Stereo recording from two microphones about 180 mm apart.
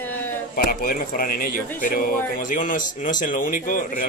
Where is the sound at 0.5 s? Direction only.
50° left (ahead or behind).